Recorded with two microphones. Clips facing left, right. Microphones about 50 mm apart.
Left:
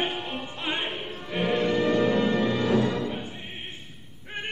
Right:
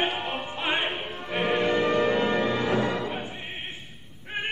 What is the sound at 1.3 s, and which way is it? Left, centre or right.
Music, right.